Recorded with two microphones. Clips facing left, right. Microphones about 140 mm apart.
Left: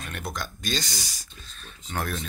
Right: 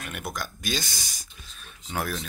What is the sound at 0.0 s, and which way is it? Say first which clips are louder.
Speech: even; 5° right (ahead or behind).